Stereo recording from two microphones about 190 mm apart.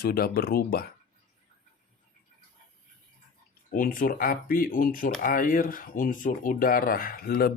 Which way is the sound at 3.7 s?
45° left (ahead or behind).